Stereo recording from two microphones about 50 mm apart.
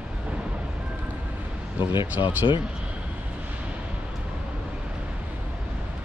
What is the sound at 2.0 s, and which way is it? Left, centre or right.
Speech, right.